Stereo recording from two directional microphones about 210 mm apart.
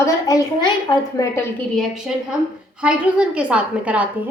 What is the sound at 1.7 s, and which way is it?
A woman's voice, centre (ahead or behind).